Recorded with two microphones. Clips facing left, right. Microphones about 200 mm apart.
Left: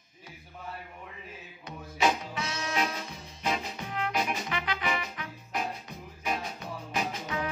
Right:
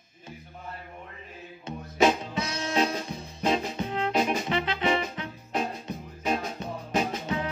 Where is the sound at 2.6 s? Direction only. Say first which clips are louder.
Right 6 dB; 30° right (ahead or behind).